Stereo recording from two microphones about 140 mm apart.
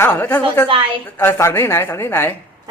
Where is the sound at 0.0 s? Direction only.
10° left (ahead or behind).